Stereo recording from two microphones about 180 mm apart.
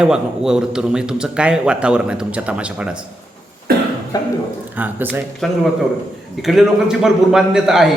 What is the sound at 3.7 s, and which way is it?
Cough, 60° right (ahead or behind).